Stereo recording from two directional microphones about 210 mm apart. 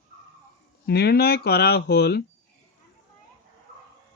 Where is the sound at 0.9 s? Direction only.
50° left (ahead or behind).